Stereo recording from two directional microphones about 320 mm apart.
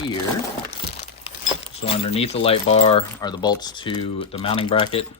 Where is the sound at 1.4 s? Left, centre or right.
Centre.